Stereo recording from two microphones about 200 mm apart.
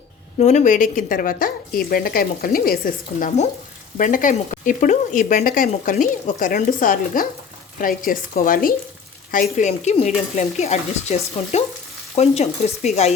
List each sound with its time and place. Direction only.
0.3 s speech: 35° left (ahead or behind)